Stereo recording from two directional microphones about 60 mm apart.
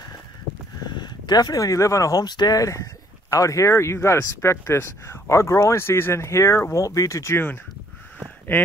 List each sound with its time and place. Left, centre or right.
1.3 s speech: left
5.3 s speech: left
6.2 s speech: left